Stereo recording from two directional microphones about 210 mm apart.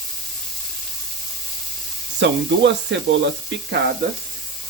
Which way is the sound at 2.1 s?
55° right (ahead or behind).